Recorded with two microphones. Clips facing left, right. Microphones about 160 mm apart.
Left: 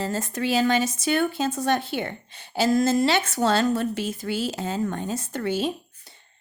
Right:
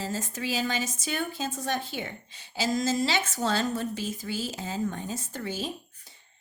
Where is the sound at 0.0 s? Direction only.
65° left (ahead or behind).